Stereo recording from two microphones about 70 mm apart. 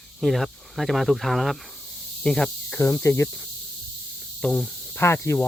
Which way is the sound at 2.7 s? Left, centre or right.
Left.